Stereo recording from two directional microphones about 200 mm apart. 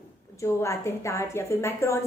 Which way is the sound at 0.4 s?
15° left (ahead or behind).